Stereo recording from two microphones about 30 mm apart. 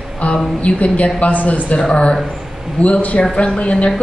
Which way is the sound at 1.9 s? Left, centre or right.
Left.